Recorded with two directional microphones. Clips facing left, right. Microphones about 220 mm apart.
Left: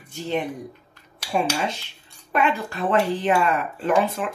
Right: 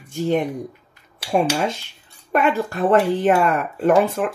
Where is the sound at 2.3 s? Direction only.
45° right (ahead or behind).